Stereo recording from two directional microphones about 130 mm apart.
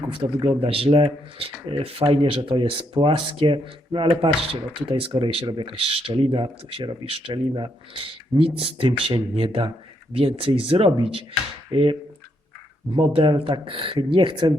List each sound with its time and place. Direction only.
0.1 s speech: 45° right (ahead or behind)
13.0 s speech: 45° right (ahead or behind)